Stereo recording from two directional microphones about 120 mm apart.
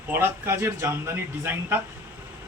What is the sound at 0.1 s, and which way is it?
Speech, 20° right (ahead or behind).